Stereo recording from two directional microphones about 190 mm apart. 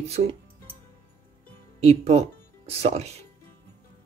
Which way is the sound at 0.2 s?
35° right (ahead or behind).